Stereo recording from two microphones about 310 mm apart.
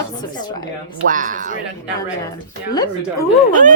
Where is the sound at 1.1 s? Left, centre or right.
Right.